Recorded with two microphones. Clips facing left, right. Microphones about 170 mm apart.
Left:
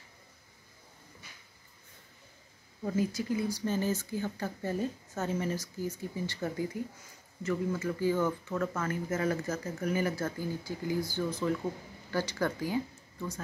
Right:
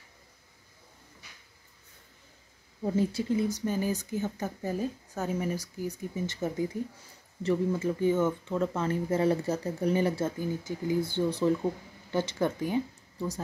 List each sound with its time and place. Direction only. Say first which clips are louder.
2.8 s speech: right 3 dB; 25° right (ahead or behind)
7.7 s speech: right 3 dB; 20° right (ahead or behind)
13.2 s speech: right 5 dB; 35° right (ahead or behind)